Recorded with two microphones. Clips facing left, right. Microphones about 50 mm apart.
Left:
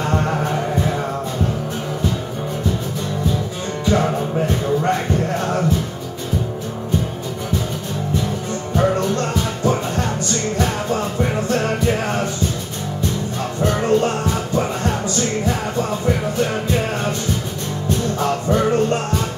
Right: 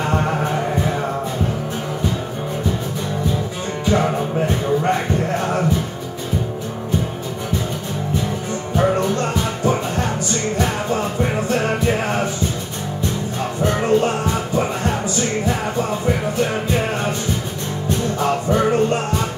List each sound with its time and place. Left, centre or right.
0.0 s music: centre
3.8 s music: centre
8.7 s music: centre
13.4 s music: centre
18.2 s music: centre